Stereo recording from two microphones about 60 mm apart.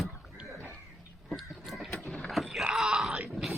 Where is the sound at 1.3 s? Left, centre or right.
Centre.